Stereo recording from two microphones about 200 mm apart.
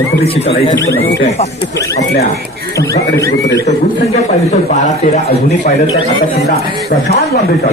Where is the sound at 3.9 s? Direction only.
35° left (ahead or behind).